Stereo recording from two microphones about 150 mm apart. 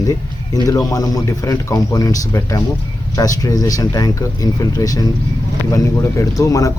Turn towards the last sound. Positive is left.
turn(degrees=20)  # may be behind; listen again after turning